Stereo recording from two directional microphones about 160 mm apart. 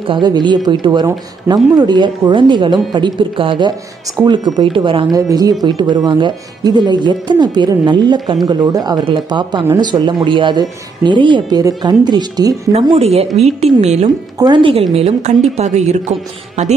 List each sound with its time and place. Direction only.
0.0 s speech: 30° right (ahead or behind)
12.7 s a woman's voice: 40° right (ahead or behind)
14.4 s a woman's voice: 30° right (ahead or behind)